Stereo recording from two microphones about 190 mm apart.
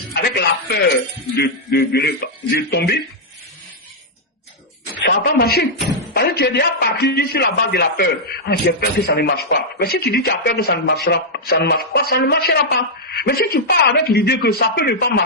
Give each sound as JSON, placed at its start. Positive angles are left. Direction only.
{"t": 0.1, "sound": "speech", "side_deg": 60}
{"t": 5.0, "sound": "a man's voice", "side_deg": 55}